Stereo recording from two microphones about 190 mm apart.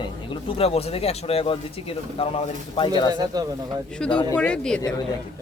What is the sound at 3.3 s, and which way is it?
Speech, 20° right (ahead or behind).